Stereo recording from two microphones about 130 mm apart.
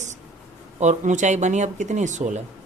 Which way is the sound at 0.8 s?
70° right (ahead or behind).